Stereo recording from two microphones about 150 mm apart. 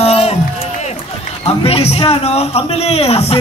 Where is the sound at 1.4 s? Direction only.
40° left (ahead or behind).